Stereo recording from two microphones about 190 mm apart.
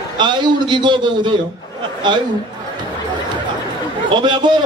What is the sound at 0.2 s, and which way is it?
A man's voice, 25° right (ahead or behind).